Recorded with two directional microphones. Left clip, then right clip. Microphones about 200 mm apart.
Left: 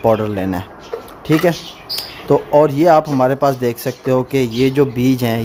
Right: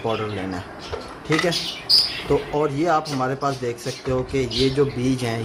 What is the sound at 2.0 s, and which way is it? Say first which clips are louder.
Speech: left 8 dB; 50° left (ahead or behind).